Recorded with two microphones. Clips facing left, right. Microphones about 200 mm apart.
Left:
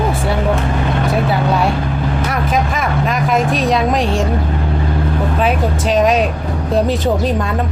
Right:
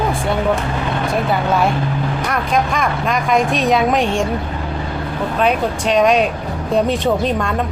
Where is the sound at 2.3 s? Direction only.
5° left (ahead or behind).